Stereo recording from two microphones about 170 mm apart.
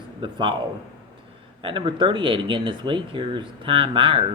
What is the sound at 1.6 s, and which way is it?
Speech, 30° right (ahead or behind).